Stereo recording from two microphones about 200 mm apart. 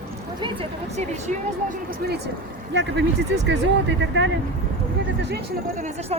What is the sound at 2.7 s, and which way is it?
Speech, 65° right (ahead or behind).